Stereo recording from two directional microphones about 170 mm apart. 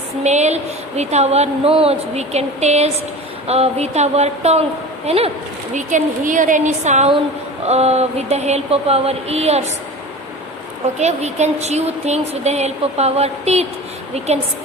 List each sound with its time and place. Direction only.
0.3 s a woman's voice: 40° right (ahead or behind)
5.7 s a woman's voice: 50° right (ahead or behind)
11.0 s a woman's voice: 40° right (ahead or behind)